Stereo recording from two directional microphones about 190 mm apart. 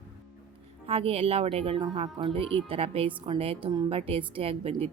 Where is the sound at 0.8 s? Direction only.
30° right (ahead or behind).